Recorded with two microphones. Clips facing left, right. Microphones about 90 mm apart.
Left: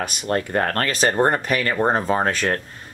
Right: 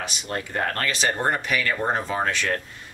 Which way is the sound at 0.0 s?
50° left (ahead or behind).